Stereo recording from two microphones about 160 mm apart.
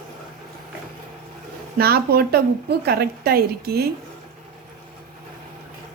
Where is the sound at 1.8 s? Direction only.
75° right (ahead or behind).